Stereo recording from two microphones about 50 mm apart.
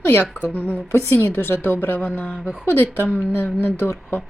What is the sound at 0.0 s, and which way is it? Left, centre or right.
A woman's voice, left.